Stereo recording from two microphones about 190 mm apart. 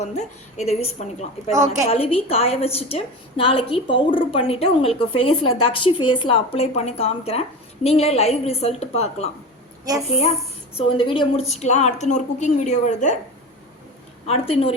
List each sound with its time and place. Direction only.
0.0 s a woman's voice: 35° left (ahead or behind)
9.9 s a woman's voice: 20° right (ahead or behind)
10.8 s a woman's voice: 25° left (ahead or behind)
14.3 s a woman's voice: 30° left (ahead or behind)